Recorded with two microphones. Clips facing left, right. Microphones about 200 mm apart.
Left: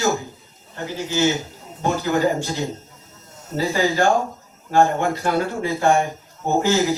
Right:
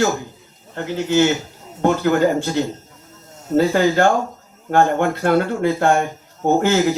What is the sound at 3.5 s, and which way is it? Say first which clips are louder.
Speech: right 6 dB; 60° right (ahead or behind).